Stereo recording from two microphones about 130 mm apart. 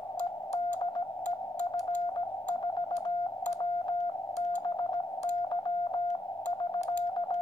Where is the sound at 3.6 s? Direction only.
35° left (ahead or behind).